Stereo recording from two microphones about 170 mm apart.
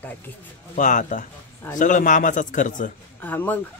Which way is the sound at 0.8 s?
50° left (ahead or behind).